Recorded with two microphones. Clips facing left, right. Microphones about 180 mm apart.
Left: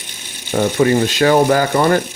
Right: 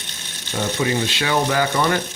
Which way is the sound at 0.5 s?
50° left (ahead or behind).